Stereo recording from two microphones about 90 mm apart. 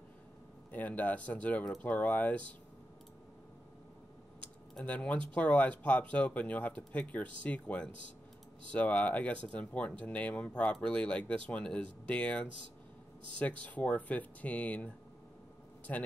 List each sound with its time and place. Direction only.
0.7 s speech: 15° left (ahead or behind)
4.7 s speech: 15° left (ahead or behind)
15.9 s speech: 15° left (ahead or behind)